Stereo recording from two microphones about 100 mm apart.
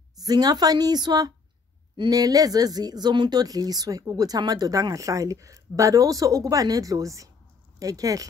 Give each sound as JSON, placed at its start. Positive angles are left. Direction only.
{"t": 0.2, "sound": "speech", "side_deg": -40}